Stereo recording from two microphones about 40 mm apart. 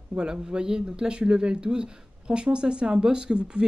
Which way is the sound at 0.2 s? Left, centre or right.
Centre.